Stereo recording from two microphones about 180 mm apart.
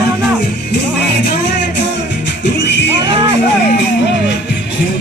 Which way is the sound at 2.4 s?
80° left.